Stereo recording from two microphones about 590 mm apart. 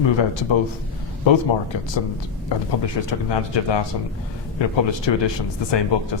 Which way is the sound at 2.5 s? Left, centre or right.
Left.